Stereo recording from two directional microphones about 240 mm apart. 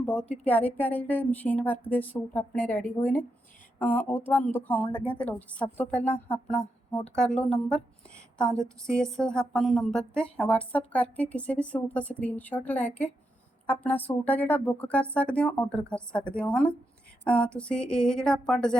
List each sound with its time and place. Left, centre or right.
0.0 s a woman's voice: centre
6.1 s speech: left
7.2 s a woman's voice: centre
8.6 s a woman's voice: centre